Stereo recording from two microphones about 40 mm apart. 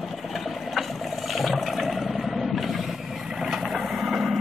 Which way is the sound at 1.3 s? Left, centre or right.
Centre.